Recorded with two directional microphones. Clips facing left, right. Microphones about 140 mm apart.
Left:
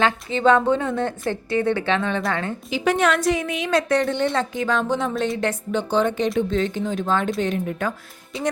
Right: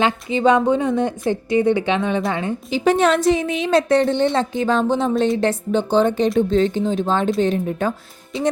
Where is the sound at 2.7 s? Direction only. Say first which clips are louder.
Right 4 dB; 30° right (ahead or behind).